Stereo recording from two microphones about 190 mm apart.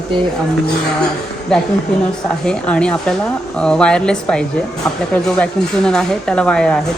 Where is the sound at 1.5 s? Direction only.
5° left (ahead or behind).